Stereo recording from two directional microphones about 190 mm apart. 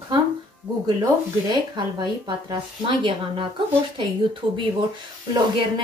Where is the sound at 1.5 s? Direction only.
25° right (ahead or behind).